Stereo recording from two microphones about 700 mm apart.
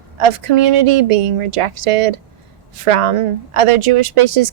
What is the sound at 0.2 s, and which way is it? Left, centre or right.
Speech, right.